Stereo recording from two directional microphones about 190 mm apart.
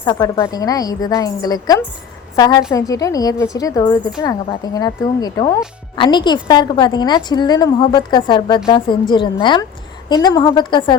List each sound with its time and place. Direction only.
0.0 s a woman's voice: 20° left (ahead or behind)